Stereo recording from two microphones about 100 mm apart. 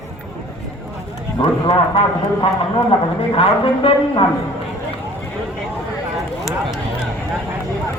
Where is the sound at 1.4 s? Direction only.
60° left (ahead or behind).